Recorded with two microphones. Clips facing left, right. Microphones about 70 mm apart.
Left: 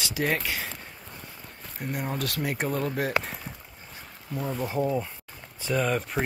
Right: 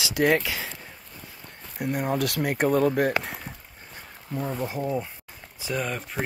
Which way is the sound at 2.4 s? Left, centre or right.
Right.